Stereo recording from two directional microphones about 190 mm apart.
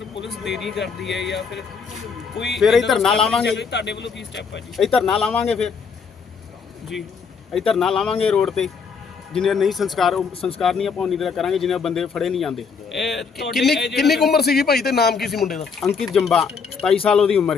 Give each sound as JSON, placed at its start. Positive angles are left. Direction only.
{"t": 0.3, "sound": "speech", "side_deg": 0}
{"t": 2.6, "sound": "speech", "side_deg": 0}
{"t": 3.6, "sound": "speech", "side_deg": 65}
{"t": 4.8, "sound": "speech", "side_deg": 0}
{"t": 7.5, "sound": "speech", "side_deg": 0}
{"t": 14.3, "sound": "a man's voice", "side_deg": 55}
{"t": 15.1, "sound": "speech", "side_deg": 0}